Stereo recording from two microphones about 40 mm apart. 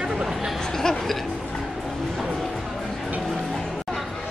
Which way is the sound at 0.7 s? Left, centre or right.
Centre.